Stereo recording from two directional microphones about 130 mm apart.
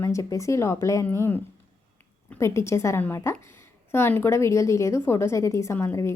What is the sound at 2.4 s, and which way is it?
A woman's voice, 20° left (ahead or behind).